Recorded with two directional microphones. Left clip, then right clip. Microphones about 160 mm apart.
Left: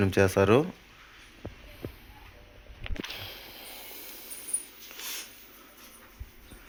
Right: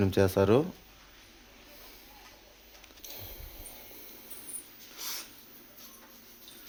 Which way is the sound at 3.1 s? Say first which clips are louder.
Left 8 dB; 5° right (ahead or behind).